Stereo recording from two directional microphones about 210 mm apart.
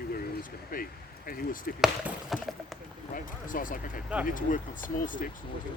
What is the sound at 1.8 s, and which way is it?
Speech, centre (ahead or behind).